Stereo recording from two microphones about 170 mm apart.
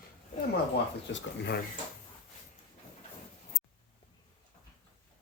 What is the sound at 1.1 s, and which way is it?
Speech, 85° left.